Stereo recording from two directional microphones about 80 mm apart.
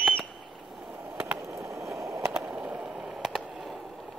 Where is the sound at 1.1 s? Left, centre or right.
Right.